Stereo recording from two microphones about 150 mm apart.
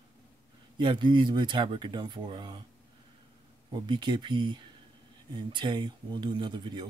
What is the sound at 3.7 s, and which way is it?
Speech, 30° right (ahead or behind).